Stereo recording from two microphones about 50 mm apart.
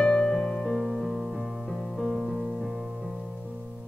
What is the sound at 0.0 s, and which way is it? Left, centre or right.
Music, centre.